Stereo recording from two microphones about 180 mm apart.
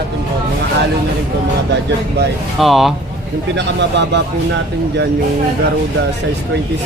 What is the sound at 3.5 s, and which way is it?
Speech, 75° right (ahead or behind).